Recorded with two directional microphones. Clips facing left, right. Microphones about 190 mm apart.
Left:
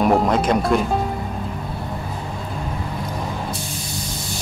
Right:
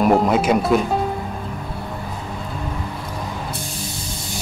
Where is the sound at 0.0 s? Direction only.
Centre (ahead or behind).